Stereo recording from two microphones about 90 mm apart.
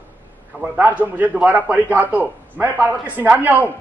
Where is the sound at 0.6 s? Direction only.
15° right (ahead or behind).